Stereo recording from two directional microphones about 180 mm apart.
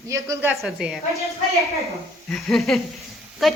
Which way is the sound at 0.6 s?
5° right (ahead or behind).